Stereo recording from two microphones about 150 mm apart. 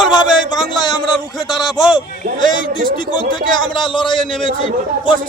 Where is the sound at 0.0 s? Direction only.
30° left (ahead or behind).